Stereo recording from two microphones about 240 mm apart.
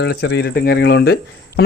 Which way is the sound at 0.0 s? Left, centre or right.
Left.